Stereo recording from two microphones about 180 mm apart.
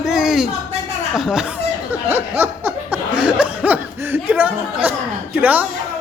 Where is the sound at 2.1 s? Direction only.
10° right (ahead or behind).